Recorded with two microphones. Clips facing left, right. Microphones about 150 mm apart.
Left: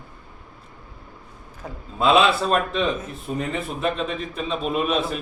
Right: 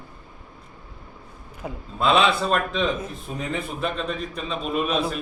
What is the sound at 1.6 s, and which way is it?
Speech, 10° right (ahead or behind).